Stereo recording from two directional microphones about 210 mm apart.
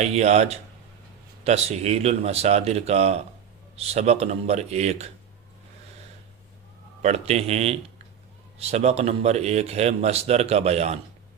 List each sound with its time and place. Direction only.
0.0 s speech: 30° right (ahead or behind)
7.0 s speech: 30° right (ahead or behind)